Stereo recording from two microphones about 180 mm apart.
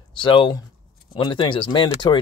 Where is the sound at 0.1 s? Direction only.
25° left (ahead or behind).